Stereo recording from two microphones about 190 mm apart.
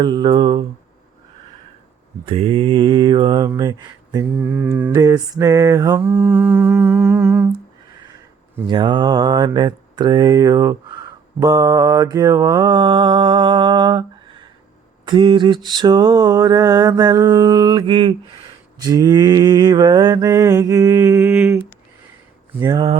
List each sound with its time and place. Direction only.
0.0 s mantra: 20° right (ahead or behind)
2.2 s mantra: 30° right (ahead or behind)
3.5 s speech: 20° right (ahead or behind)
4.4 s mantra: 10° right (ahead or behind)
4.9 s mantra: 20° right (ahead or behind)
8.6 s mantra: 25° right (ahead or behind)
22.6 s mantra: 20° right (ahead or behind)